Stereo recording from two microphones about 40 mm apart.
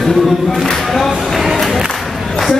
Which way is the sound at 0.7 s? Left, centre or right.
Centre.